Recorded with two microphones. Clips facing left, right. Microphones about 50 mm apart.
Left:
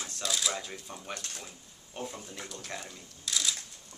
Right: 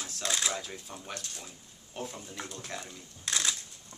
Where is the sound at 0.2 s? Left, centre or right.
Right.